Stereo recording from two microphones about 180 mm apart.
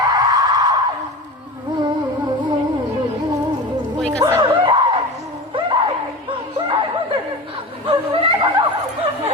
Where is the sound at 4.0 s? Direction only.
5° left (ahead or behind).